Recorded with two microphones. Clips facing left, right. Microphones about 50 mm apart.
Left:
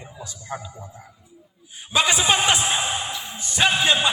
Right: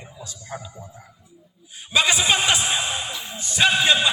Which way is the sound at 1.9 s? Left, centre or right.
Left.